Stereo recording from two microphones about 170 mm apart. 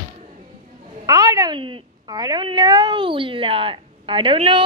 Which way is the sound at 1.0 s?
20° right (ahead or behind).